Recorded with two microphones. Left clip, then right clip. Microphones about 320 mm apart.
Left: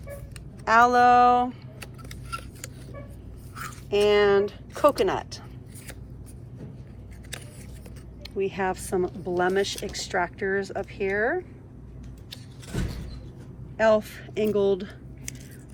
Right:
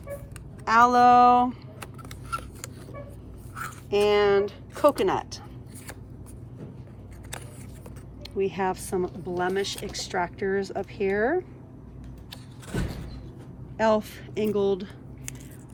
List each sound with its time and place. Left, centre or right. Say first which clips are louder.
0.6 s a sound: even; centre
3.8 s speech: left 1 dB; centre
8.2 s speech: even; centre
12.3 s vehicle: right 2 dB; centre
13.7 s speech: left 2 dB; centre